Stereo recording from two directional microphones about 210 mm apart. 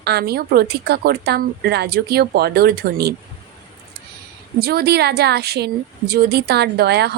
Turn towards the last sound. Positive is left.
turn(degrees=-50)  # may be behind; listen again after turning